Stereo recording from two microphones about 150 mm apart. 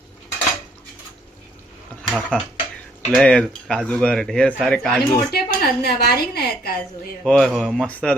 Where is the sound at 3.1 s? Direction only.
5° left (ahead or behind).